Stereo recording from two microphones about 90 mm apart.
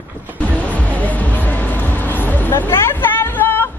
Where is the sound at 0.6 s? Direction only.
15° left (ahead or behind).